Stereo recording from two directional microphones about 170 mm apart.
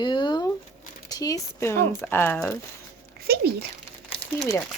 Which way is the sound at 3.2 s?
70° right (ahead or behind).